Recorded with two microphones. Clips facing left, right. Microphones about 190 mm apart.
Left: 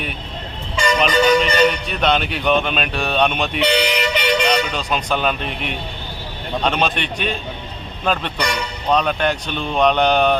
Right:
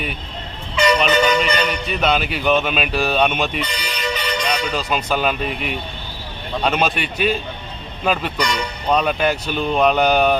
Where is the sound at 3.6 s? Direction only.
75° left (ahead or behind).